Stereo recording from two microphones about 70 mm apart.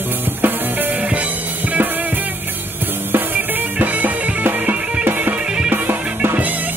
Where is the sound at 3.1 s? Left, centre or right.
Right.